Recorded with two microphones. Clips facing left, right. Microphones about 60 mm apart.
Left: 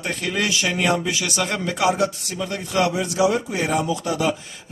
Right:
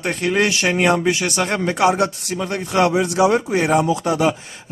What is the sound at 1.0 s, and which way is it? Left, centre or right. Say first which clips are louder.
Speech: right 5 dB; right.